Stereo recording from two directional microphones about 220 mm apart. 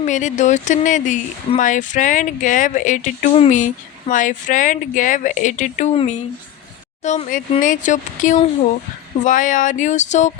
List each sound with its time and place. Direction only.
0.0 s speech: 35° left (ahead or behind)